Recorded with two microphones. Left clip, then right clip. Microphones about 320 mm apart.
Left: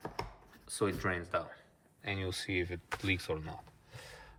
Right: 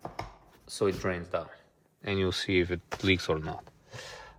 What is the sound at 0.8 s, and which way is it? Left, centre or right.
Speech, centre.